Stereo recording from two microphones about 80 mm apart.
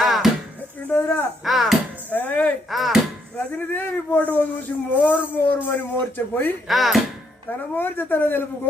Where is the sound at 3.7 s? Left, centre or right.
Left.